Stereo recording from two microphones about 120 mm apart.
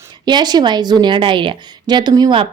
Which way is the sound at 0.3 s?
35° right (ahead or behind).